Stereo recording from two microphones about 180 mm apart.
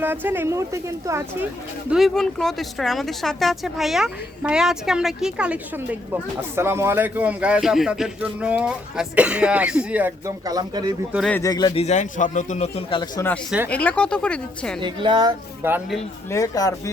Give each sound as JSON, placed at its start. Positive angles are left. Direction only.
{"t": 0.0, "sound": "speech", "side_deg": -10}
{"t": 1.9, "sound": "speech", "side_deg": 0}
{"t": 11.3, "sound": "speech", "side_deg": 15}
{"t": 11.8, "sound": "a man's voice", "side_deg": 40}
{"t": 13.7, "sound": "speech", "side_deg": 10}
{"t": 14.8, "sound": "speech", "side_deg": -25}
{"t": 15.6, "sound": "speech", "side_deg": -10}
{"t": 16.3, "sound": "speech", "side_deg": 20}